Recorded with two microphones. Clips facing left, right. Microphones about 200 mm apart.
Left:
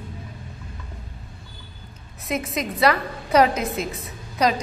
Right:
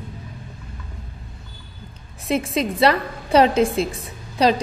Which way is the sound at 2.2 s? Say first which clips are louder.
Right 5 dB; 30° right (ahead or behind).